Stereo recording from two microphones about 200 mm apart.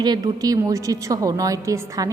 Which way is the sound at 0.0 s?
20° right (ahead or behind).